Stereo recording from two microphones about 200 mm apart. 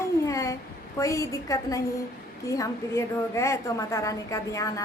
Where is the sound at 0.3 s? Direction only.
15° left (ahead or behind).